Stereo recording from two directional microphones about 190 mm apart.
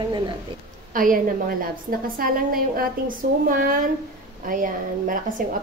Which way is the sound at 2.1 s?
50° right (ahead or behind).